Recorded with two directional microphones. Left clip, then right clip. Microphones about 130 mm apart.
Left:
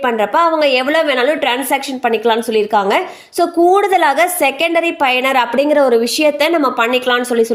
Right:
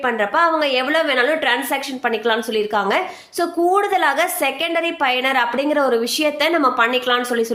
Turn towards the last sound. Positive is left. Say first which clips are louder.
# left 5 dB
turn(degrees=35)  # may be behind; listen again after turning